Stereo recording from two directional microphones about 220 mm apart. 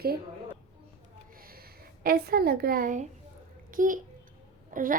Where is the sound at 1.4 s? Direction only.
40° right (ahead or behind).